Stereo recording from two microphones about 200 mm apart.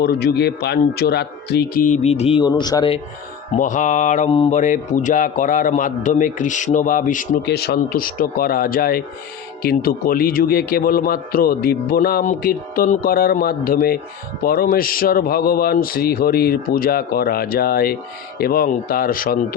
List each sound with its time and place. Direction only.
0.0 s a man's voice: 50° left (ahead or behind); by 3.0 s 20° left (ahead or behind)
3.6 s a man's voice: 40° left (ahead or behind)
7.4 s a man's voice: 55° left (ahead or behind)